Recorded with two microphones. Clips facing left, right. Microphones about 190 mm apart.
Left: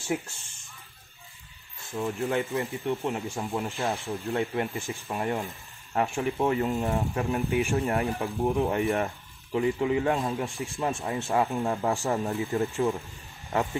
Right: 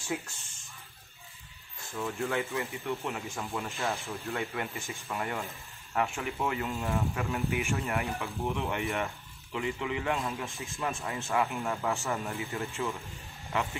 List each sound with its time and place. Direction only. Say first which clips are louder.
2.0 s speech: left 4 dB; 25° left (ahead or behind)